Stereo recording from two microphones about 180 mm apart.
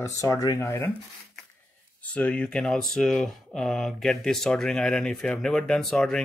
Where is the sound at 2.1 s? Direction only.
5° left (ahead or behind).